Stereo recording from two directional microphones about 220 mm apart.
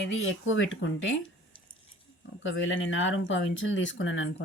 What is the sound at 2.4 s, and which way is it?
Speech, 60° left (ahead or behind).